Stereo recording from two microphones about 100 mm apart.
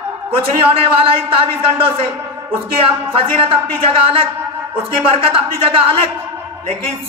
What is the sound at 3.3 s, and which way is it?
A man's voice, 65° right (ahead or behind).